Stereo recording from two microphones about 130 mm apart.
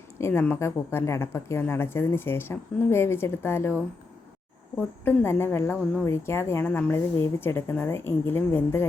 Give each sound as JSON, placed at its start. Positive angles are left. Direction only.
{"t": 0.2, "sound": "speech", "side_deg": 20}
{"t": 5.0, "sound": "a woman's voice", "side_deg": 20}